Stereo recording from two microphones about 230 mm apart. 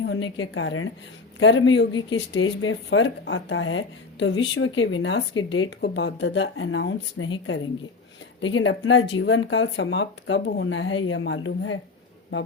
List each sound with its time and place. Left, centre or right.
0.0 s speech: left
1.9 s speech: centre
2.1 s speech: left